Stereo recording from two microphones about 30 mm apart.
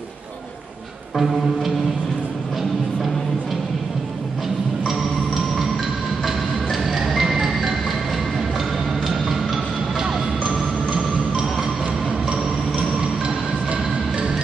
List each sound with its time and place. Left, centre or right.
1.1 s music: centre
4.8 s music: centre
10.4 s music: right